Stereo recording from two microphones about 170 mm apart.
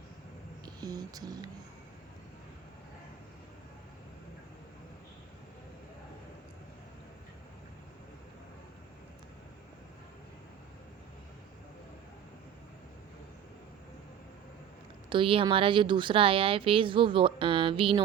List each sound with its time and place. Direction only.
0.6 s music: 25° right (ahead or behind)
15.1 s a woman's voice: 30° right (ahead or behind)